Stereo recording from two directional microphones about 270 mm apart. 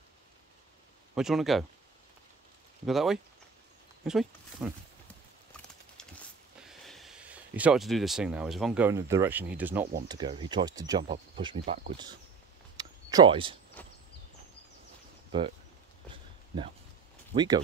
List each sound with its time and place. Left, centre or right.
1.1 s speech: centre
2.9 s speech: centre
5.9 s a sound: centre
10.0 s speech: centre
12.7 s a sound: centre
17.3 s speech: centre